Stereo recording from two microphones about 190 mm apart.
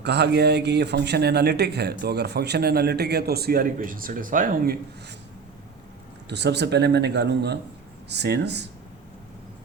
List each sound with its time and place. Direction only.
0.0 s speech: 60° right (ahead or behind)
6.2 s speech: 65° right (ahead or behind)